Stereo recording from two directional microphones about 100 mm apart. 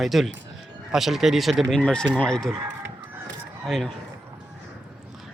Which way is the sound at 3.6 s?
Centre (ahead or behind).